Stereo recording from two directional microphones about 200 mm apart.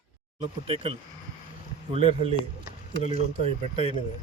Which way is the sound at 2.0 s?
30° right (ahead or behind).